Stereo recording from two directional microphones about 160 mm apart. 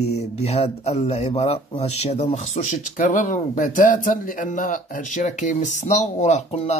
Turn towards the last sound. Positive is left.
turn(degrees=40)  # may be behind; listen again after turning